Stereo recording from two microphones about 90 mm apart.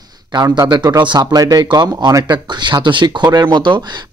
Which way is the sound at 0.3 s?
50° right (ahead or behind).